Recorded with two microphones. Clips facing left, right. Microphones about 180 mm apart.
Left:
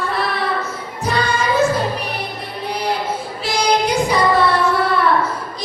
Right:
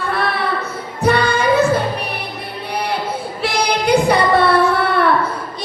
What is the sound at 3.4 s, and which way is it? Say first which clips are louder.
Female singing: even; 60° right (ahead or behind).